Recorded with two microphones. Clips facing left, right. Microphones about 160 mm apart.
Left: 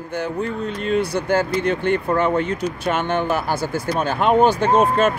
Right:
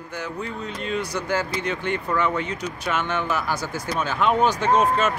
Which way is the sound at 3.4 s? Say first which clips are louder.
Left 4 dB; 30° left (ahead or behind).